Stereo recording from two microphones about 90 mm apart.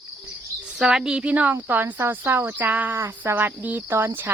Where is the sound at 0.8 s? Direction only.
5° right (ahead or behind).